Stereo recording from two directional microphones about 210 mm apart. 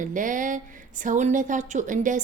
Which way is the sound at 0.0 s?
40° right (ahead or behind).